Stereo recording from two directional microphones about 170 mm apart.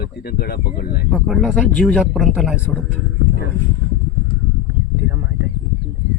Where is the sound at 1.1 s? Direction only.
Centre (ahead or behind).